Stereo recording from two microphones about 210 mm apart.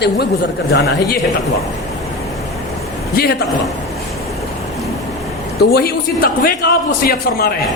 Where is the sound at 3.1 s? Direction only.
45° left (ahead or behind).